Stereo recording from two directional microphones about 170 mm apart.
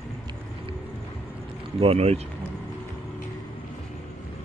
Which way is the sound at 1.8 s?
35° right (ahead or behind).